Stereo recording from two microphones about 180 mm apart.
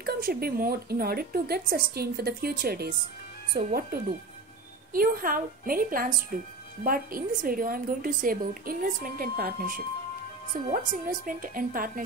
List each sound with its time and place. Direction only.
0.0 s a woman's voice: 55° right (ahead or behind)